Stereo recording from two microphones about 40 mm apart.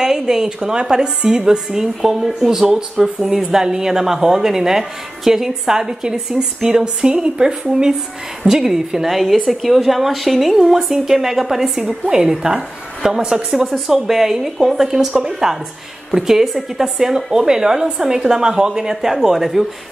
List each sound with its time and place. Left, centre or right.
0.0 s a woman's voice: centre
6.1 s a woman's voice: centre
6.7 s a woman's voice: centre